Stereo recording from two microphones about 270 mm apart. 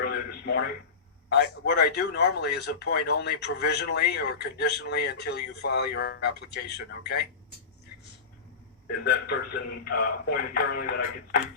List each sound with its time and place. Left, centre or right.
0.0 s radio: left
1.3 s a man's voice: left
9.0 s a man's voice: left